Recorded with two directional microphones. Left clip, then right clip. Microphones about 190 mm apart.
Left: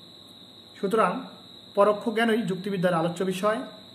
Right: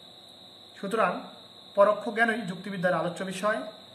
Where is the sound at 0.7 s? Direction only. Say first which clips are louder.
Left 3 dB; 10° left (ahead or behind).